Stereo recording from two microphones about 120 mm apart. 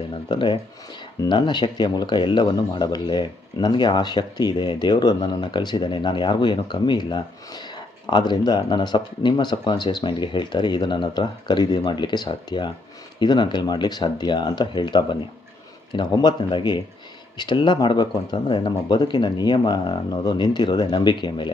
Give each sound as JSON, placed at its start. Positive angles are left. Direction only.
{"t": 0.1, "sound": "speech", "side_deg": 40}